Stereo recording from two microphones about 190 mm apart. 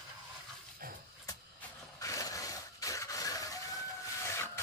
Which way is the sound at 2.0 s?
20° left (ahead or behind).